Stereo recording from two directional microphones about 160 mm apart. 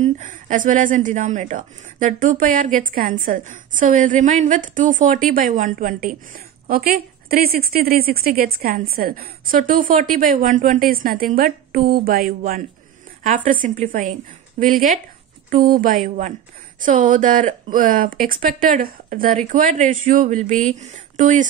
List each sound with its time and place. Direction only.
0.0 s a woman's voice: 50° right (ahead or behind)
13.2 s a woman's voice: 55° right (ahead or behind)